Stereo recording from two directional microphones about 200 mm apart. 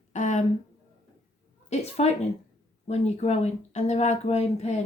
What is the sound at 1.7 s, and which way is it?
A woman's voice, 30° left (ahead or behind).